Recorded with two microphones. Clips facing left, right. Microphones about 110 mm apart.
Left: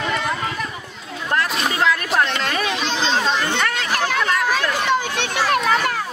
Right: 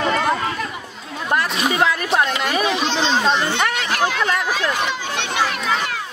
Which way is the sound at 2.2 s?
5° right (ahead or behind).